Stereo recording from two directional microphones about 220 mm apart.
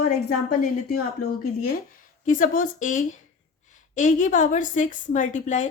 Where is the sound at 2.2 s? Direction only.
35° left (ahead or behind).